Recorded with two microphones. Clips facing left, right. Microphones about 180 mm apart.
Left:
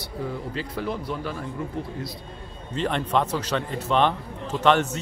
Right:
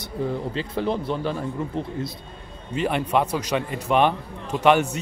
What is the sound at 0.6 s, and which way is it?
Speech, 25° right (ahead or behind).